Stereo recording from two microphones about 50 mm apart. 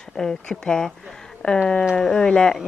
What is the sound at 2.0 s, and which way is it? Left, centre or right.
Speech, centre.